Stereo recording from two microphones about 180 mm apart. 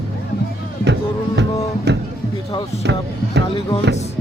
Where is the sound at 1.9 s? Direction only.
70° right (ahead or behind).